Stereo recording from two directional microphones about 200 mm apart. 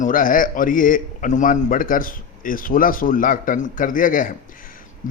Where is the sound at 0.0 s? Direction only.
45° left (ahead or behind).